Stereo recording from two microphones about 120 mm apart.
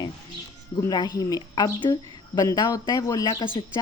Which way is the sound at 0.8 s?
35° left (ahead or behind).